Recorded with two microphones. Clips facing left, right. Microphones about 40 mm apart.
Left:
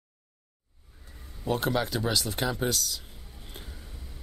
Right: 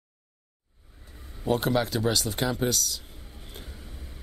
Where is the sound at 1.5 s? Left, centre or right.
Centre.